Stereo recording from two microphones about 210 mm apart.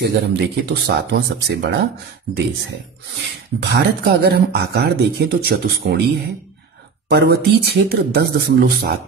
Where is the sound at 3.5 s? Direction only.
55° right (ahead or behind).